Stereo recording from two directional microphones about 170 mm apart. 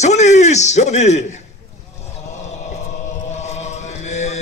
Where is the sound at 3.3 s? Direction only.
40° left (ahead or behind).